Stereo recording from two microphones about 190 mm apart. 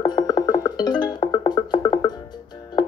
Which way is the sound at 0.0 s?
20° left (ahead or behind).